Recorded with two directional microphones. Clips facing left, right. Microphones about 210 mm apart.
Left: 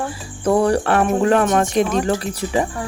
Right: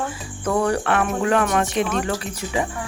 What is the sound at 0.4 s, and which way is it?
Speech, 35° left (ahead or behind).